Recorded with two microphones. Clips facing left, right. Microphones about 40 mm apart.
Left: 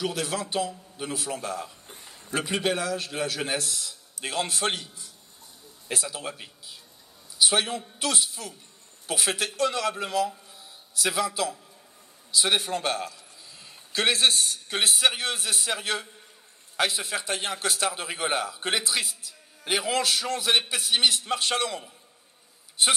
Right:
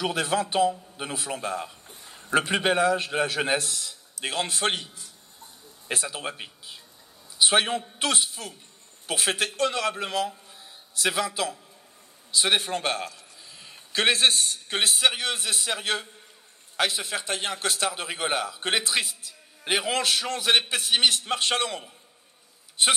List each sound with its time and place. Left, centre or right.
0.0 s a man's voice: right